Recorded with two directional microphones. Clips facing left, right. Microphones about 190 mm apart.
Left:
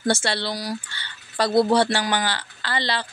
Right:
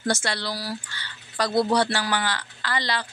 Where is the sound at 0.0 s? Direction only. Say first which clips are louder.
Left 3 dB; 30° left (ahead or behind).